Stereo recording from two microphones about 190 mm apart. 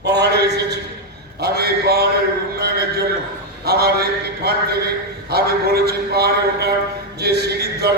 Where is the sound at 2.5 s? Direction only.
55° right (ahead or behind).